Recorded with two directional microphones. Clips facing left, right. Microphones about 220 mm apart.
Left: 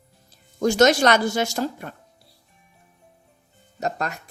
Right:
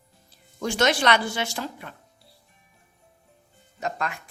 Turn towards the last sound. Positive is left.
turn(degrees=40)  # may be behind; listen again after turning